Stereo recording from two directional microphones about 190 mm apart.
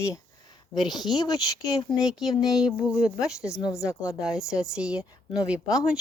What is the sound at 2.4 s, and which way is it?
Speech, centre (ahead or behind).